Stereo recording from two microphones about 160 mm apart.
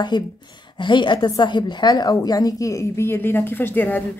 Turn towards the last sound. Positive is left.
turn(degrees=10)  # may be behind; listen again after turning